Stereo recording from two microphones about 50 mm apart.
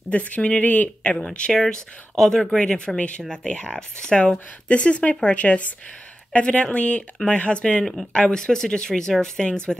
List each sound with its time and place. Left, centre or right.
0.1 s speech: left
1.1 s speech: centre
7.8 s speech: centre
8.1 s speech: centre